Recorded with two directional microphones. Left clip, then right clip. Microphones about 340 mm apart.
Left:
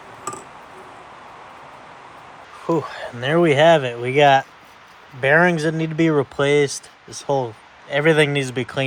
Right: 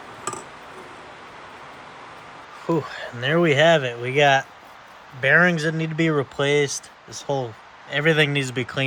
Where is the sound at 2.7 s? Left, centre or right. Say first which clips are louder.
Left 3 dB; centre.